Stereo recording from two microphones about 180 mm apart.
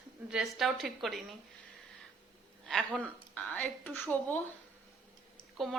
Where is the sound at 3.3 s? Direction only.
10° left (ahead or behind).